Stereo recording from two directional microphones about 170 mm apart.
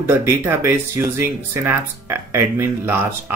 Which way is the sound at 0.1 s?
15° right (ahead or behind).